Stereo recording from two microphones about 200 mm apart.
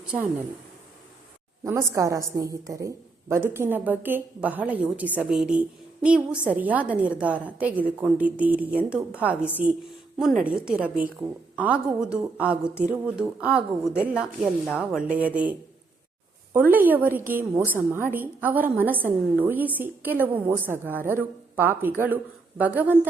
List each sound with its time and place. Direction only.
0.0 s speech: 5° right (ahead or behind)
1.6 s a woman's voice: 15° right (ahead or behind)